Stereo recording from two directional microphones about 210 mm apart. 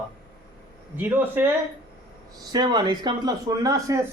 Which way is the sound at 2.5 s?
20° right (ahead or behind).